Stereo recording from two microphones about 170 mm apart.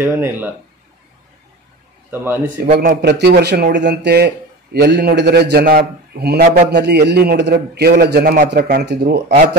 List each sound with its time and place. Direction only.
0.0 s speech: 15° right (ahead or behind)
2.0 s speech: 15° right (ahead or behind)
2.7 s speech: 45° right (ahead or behind)
3.0 s a man's voice: 75° right (ahead or behind)